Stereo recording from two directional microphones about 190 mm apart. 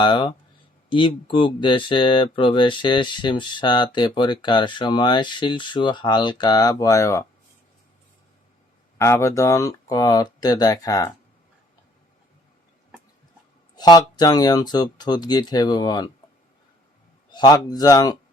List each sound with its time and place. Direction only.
0.0 s speech: 25° left (ahead or behind)
9.0 s speech: 15° left (ahead or behind)
13.7 s speech: 20° left (ahead or behind)
17.3 s speech: 20° left (ahead or behind)